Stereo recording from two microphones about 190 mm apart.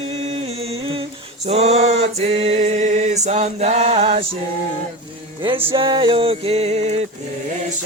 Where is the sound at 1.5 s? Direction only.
35° right (ahead or behind).